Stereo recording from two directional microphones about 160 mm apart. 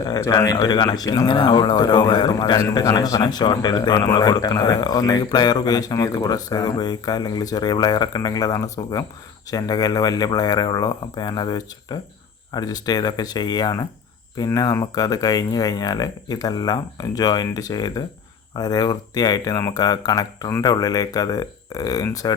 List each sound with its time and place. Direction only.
0.0 s speech: 25° left (ahead or behind)